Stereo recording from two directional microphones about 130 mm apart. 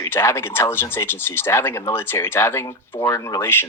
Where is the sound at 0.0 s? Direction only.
20° left (ahead or behind).